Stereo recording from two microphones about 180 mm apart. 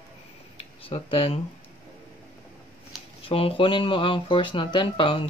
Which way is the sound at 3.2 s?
30° left (ahead or behind).